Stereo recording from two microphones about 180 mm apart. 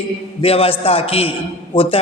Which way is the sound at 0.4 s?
30° left (ahead or behind).